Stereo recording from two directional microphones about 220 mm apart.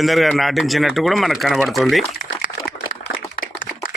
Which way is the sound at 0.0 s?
Centre (ahead or behind).